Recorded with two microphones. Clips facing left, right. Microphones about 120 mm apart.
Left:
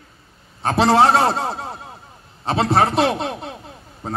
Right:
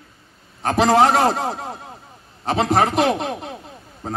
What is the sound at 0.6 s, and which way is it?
Speech, 30° left (ahead or behind).